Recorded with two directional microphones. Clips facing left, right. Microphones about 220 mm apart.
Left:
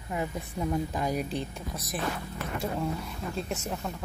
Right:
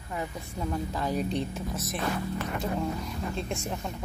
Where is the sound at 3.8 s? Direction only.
5° left (ahead or behind).